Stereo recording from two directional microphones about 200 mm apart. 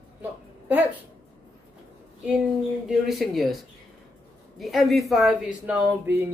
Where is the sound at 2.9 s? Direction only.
Centre (ahead or behind).